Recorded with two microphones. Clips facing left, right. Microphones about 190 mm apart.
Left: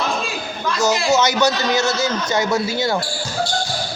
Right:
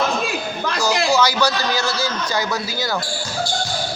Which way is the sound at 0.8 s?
20° left (ahead or behind).